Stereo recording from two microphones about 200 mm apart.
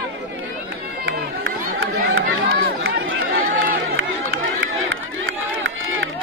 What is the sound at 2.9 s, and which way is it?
Run, 80° right.